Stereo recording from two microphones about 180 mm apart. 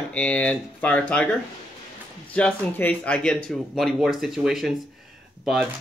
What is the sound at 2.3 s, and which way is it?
Speech, 10° left (ahead or behind).